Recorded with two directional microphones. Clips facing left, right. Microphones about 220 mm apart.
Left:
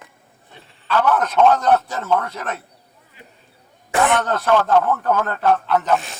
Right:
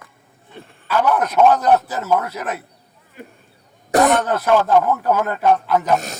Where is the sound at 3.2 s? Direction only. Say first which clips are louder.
Right 9 dB; 50° right (ahead or behind).